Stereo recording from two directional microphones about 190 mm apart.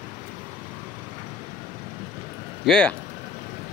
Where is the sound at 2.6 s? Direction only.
5° left (ahead or behind).